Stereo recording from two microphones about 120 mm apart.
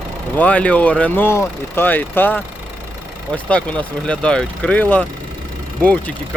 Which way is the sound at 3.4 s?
10° left (ahead or behind).